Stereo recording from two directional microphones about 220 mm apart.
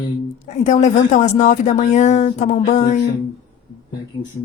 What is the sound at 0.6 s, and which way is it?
Speech, 30° left (ahead or behind).